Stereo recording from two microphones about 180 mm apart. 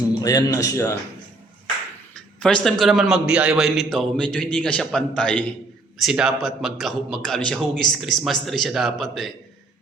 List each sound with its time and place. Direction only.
0.2 s speech: 20° left (ahead or behind)
2.1 s a man's voice: 5° left (ahead or behind)